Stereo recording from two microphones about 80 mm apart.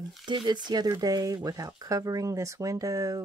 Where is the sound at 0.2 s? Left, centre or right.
Right.